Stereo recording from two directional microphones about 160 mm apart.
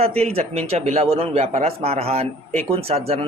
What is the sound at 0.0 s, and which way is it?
Speech, 40° right (ahead or behind).